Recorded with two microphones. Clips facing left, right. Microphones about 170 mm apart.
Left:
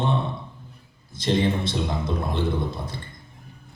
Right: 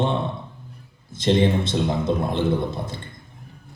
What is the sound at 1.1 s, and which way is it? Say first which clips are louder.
A man's voice: right 4 dB; 20° right (ahead or behind).